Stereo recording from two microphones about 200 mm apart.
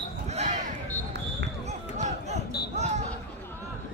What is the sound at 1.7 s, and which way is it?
Basketball bounce, 35° right (ahead or behind).